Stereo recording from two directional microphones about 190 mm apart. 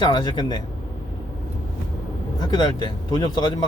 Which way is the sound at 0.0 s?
25° left (ahead or behind).